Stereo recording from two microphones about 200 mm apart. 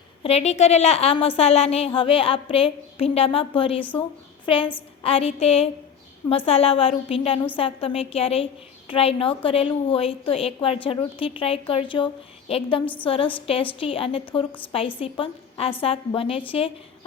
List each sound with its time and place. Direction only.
0.2 s a woman's voice: 30° left (ahead or behind)
12.8 s a woman's voice: 10° left (ahead or behind)
13.1 s a woman's voice: 25° left (ahead or behind)